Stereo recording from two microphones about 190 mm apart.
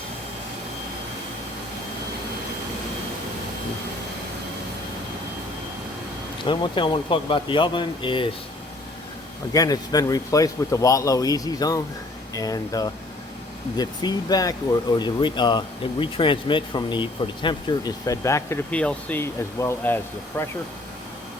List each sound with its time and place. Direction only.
6.4 s speech: 25° left (ahead or behind)
9.5 s speech: 20° left (ahead or behind)